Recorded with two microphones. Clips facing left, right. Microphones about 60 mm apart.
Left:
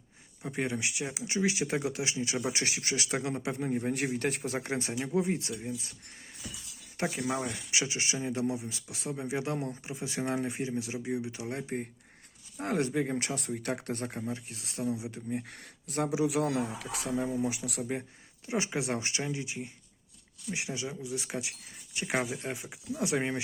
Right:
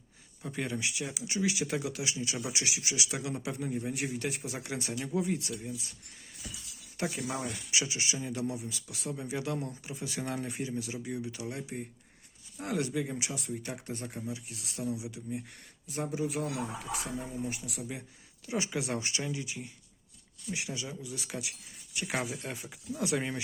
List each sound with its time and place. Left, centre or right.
0.4 s speech: left
3.7 s speech: left
6.9 s speech: left
11.6 s speech: left
14.2 s speech: left
15.3 s speech: left
18.4 s speech: left